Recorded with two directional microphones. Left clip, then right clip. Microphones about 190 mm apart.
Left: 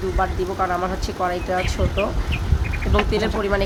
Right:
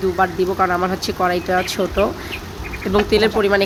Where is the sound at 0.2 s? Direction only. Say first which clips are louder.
Right 5 dB; 25° right (ahead or behind).